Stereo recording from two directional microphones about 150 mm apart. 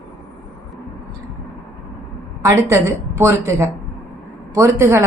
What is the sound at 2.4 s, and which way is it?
A woman's voice, 20° right (ahead or behind).